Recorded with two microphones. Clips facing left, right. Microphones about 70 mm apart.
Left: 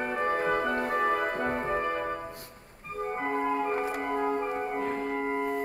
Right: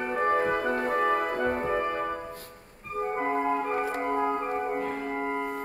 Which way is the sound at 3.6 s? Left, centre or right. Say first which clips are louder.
Right 1 dB; right.